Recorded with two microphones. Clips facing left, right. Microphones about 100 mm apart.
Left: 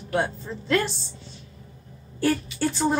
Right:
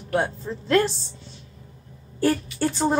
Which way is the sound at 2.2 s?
35° right (ahead or behind).